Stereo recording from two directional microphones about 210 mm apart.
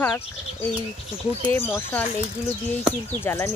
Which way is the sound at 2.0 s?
30° left (ahead or behind).